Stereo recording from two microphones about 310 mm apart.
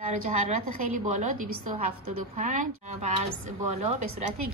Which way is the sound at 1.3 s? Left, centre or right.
Right.